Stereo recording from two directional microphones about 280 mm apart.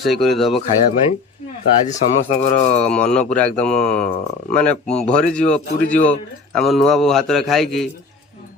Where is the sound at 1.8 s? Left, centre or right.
Left.